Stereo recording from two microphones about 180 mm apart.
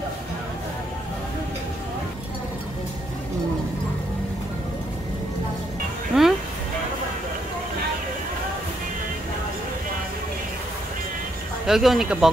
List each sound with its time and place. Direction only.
6.1 s music: 5° right (ahead or behind)
11.6 s speech: centre (ahead or behind)